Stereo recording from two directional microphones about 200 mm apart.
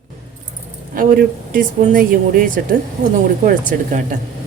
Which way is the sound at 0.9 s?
45° right (ahead or behind).